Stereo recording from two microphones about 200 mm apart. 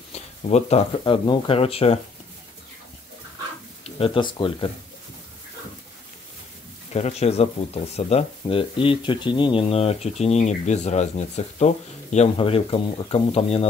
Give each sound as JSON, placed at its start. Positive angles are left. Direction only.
{"t": 0.1, "sound": "speech", "side_deg": 35}
{"t": 3.8, "sound": "speech", "side_deg": 25}
{"t": 6.9, "sound": "speech", "side_deg": 30}